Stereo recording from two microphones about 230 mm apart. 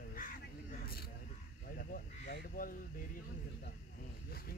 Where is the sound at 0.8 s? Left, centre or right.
Left.